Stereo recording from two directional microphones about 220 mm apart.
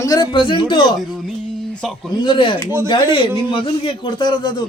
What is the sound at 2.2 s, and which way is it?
A man's voice, 20° left (ahead or behind).